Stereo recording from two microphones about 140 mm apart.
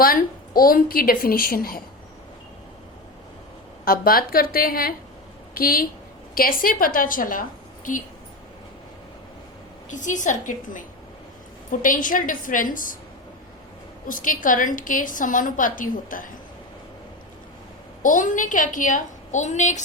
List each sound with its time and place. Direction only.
0.0 s a woman's voice: 90° left
3.8 s a woman's voice: 90° left
7.9 s a woman's voice: 70° left (ahead or behind)
9.9 s a woman's voice: 65° left (ahead or behind)
14.1 s a woman's voice: 75° left (ahead or behind)
18.0 s a woman's voice: 70° left (ahead or behind)